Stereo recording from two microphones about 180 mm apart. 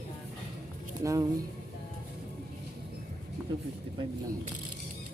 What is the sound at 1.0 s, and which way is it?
Speech, 20° right (ahead or behind).